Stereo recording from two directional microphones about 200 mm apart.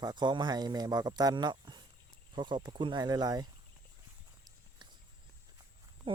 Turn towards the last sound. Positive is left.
turn(degrees=-25)  # may be behind; listen again after turning